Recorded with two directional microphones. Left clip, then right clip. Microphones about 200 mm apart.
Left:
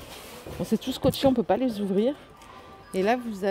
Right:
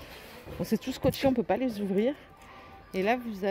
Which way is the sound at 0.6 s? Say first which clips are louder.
Left 3 dB; centre (ahead or behind).